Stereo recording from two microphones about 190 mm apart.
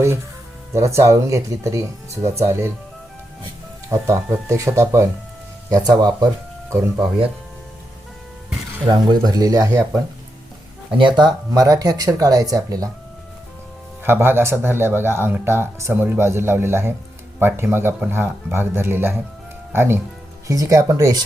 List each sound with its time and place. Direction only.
0.7 s speech: 15° right (ahead or behind)
3.8 s speech: 15° right (ahead or behind)
9.0 s speech: 20° right (ahead or behind)
10.9 s speech: 25° right (ahead or behind)
14.0 s speech: 10° right (ahead or behind)